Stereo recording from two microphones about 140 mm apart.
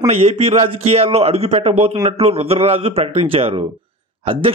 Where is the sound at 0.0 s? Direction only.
45° right (ahead or behind).